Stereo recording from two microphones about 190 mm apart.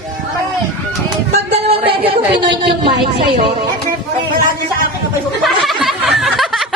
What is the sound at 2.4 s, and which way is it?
Speech, 25° right (ahead or behind).